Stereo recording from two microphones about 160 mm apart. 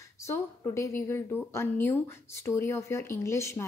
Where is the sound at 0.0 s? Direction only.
15° left (ahead or behind).